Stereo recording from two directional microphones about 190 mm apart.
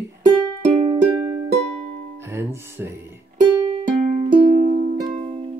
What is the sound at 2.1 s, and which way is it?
Music, 15° right (ahead or behind).